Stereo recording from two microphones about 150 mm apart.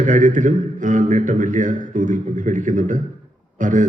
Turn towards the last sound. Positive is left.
turn(degrees=-60)  # may be behind; listen again after turning